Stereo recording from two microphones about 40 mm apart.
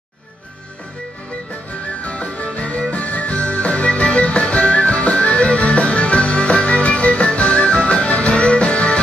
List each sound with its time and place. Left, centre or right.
2.0 s music: left